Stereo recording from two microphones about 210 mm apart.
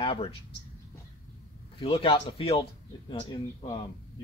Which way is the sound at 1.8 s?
25° left (ahead or behind).